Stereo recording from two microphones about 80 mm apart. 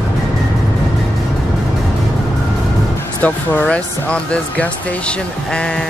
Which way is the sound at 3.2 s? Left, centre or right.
Centre.